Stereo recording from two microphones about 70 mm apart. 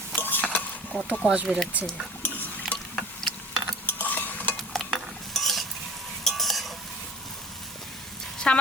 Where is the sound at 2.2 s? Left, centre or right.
Left.